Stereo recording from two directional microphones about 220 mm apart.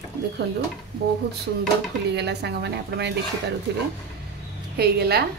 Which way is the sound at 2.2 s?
50° right (ahead or behind).